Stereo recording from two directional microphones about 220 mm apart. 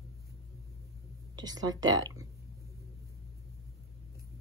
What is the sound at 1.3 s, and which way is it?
Speech, 15° right (ahead or behind).